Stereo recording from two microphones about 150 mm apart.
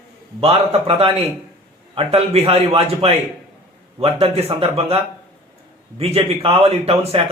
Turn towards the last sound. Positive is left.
turn(degrees=-40)  # may be behind; listen again after turning